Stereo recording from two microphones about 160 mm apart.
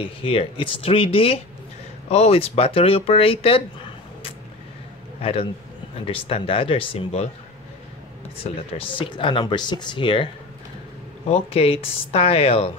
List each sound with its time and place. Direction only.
0.0 s speech: 35° left (ahead or behind)
5.2 s speech: 35° left (ahead or behind)
8.4 s speech: 35° left (ahead or behind)